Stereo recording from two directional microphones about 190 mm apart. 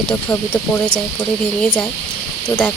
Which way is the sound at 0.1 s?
10° left (ahead or behind).